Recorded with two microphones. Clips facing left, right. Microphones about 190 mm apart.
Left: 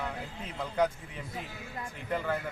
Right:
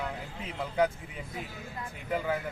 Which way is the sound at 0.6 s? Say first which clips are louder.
Right 1 dB; 5° right (ahead or behind).